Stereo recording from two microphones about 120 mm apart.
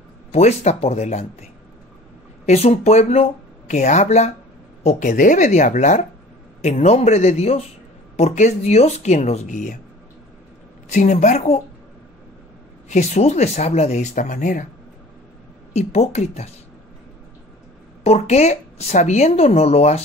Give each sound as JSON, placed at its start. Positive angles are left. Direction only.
{"t": 0.3, "sound": "speech", "side_deg": 65}
{"t": 2.4, "sound": "speech", "side_deg": 65}
{"t": 4.8, "sound": "speech", "side_deg": 90}
{"t": 6.6, "sound": "speech", "side_deg": 70}
{"t": 10.9, "sound": "speech", "side_deg": 90}
{"t": 12.9, "sound": "speech", "side_deg": 70}
{"t": 15.7, "sound": "speech", "side_deg": 65}
{"t": 18.0, "sound": "speech", "side_deg": 60}